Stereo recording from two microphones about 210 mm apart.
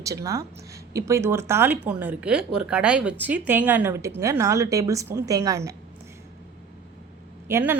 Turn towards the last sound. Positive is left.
turn(degrees=-10)  # may be behind; listen again after turning